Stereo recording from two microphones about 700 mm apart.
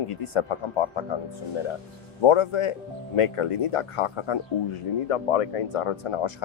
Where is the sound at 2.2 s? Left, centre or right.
Left.